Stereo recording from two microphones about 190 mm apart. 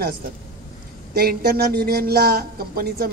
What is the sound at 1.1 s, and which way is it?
Speech, 55° right (ahead or behind).